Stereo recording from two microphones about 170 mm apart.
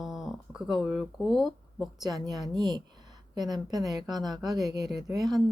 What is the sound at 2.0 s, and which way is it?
A woman's voice, 25° right (ahead or behind).